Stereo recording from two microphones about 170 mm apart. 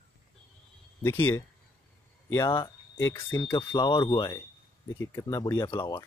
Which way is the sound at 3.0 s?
15° left (ahead or behind).